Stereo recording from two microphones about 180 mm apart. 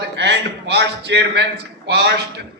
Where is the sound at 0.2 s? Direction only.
70° right (ahead or behind).